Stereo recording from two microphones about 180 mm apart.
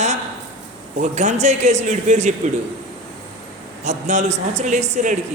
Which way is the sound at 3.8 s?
40° right (ahead or behind).